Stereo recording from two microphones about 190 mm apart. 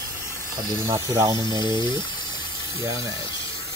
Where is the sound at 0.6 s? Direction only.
15° right (ahead or behind).